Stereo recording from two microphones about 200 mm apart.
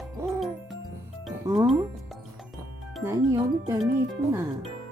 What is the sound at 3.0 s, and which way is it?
Speech, 15° right (ahead or behind).